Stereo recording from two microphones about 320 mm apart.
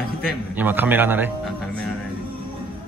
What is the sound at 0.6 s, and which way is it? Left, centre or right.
Music, centre.